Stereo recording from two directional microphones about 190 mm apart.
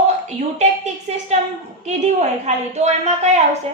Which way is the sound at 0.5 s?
35° right (ahead or behind).